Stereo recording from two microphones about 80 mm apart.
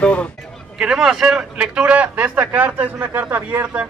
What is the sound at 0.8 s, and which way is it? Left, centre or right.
A man's voice, centre.